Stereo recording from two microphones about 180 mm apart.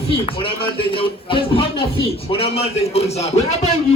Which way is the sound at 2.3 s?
35° left (ahead or behind).